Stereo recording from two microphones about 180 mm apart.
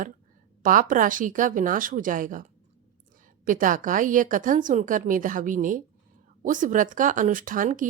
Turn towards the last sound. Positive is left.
turn(degrees=-50)  # may be behind; listen again after turning